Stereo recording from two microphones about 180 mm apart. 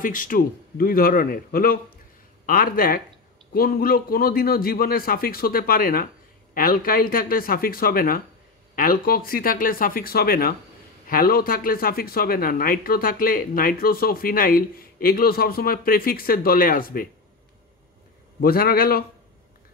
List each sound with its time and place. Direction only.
0.0 s a man's voice: 50° left (ahead or behind)
18.4 s speech: 55° left (ahead or behind)